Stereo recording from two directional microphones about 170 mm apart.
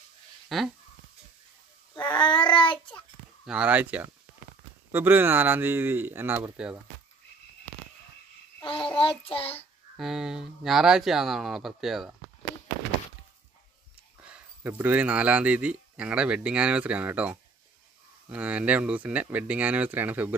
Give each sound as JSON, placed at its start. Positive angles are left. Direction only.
{"t": 0.5, "sound": "speech", "side_deg": 0}
{"t": 2.0, "sound": "child singing", "side_deg": 25}
{"t": 3.4, "sound": "speech", "side_deg": -5}
{"t": 8.6, "sound": "child singing", "side_deg": 30}
{"t": 9.9, "sound": "speech", "side_deg": 0}
{"t": 14.1, "sound": "speech", "side_deg": -10}